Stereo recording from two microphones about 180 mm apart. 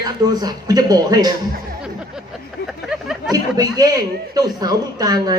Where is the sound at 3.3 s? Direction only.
20° right (ahead or behind).